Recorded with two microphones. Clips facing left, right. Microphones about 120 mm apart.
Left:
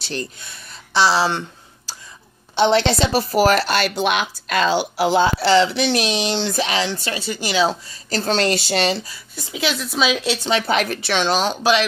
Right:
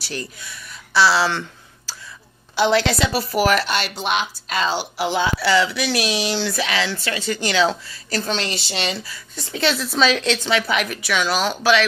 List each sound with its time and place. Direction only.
0.5 s speech: 20° left (ahead or behind)
2.5 s speech: 25° left (ahead or behind)
3.1 s speech: 40° left (ahead or behind)
3.9 s speech: 60° left (ahead or behind)
4.9 s speech: 35° left (ahead or behind)
7.2 s speech: 15° left (ahead or behind)
8.1 s speech: 35° left (ahead or behind)
9.3 s speech: 5° left (ahead or behind)
10.7 s speech: 35° left (ahead or behind)